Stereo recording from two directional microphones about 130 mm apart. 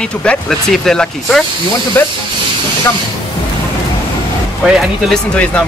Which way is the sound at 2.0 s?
15° left (ahead or behind).